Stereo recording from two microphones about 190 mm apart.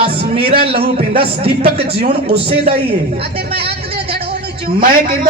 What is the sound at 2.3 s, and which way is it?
Speech, 60° right (ahead or behind).